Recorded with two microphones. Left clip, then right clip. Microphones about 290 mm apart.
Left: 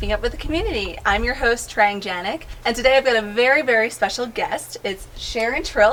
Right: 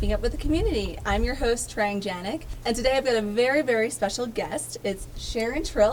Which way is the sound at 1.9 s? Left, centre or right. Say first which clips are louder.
Left 5 dB; centre.